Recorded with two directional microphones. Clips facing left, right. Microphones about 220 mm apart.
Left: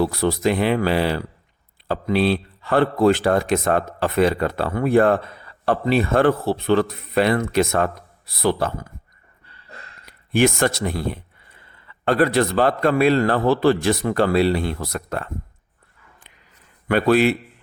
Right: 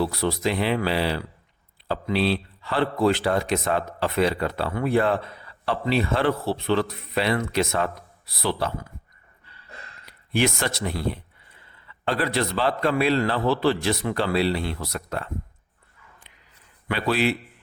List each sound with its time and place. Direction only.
0.0 s a man's voice: 50° left (ahead or behind)
10.1 s a man's voice: 50° left (ahead or behind)
16.9 s a man's voice: 50° left (ahead or behind)